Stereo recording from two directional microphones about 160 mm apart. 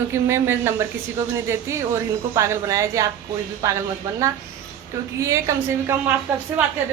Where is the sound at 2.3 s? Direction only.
20° right (ahead or behind).